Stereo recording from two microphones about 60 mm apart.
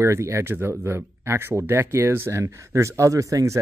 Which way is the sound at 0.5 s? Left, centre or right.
Right.